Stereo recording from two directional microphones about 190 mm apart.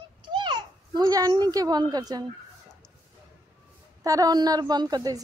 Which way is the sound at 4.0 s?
20° right (ahead or behind).